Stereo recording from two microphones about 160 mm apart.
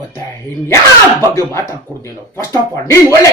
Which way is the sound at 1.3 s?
20° left (ahead or behind).